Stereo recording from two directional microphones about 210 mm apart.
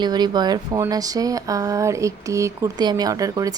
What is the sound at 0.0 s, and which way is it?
Speech, 20° right (ahead or behind).